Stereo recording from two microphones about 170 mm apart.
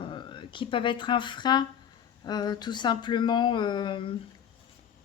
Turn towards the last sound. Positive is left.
turn(degrees=30)  # may be behind; listen again after turning